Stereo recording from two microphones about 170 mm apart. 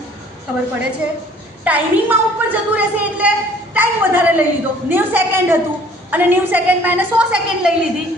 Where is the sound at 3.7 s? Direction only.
10° right (ahead or behind).